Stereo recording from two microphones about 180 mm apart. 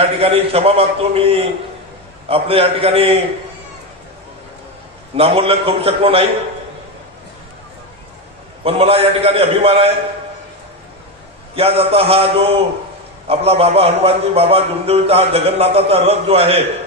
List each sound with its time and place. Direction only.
0.0 s a man's voice: 35° right (ahead or behind)
5.1 s a man's voice: 30° right (ahead or behind)
8.6 s a man's voice: 30° right (ahead or behind)
11.5 s a man's voice: 35° right (ahead or behind)